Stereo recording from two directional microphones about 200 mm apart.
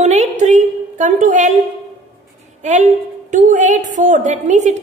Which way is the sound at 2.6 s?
35° right (ahead or behind).